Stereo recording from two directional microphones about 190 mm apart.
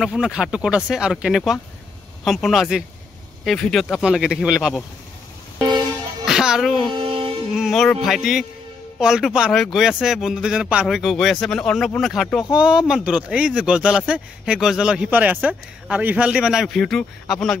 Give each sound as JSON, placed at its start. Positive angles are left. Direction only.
{"t": 0.0, "sound": "speech", "side_deg": -5}
{"t": 6.2, "sound": "speech", "side_deg": -5}
{"t": 6.9, "sound": "a sound", "side_deg": -25}
{"t": 7.5, "sound": "speech", "side_deg": 0}